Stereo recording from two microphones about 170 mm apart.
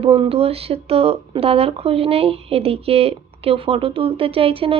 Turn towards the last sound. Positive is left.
turn(degrees=-35)  # may be behind; listen again after turning